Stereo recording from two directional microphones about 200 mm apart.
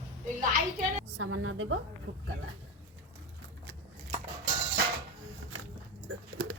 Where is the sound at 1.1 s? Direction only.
90° right.